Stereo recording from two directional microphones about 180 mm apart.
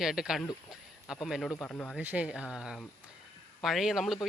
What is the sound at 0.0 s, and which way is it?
Speech, 5° right (ahead or behind).